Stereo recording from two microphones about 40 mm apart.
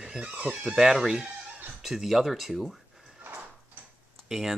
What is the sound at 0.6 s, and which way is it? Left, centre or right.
Speech, centre.